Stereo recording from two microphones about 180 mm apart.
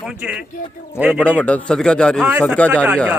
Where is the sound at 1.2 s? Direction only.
5° left (ahead or behind).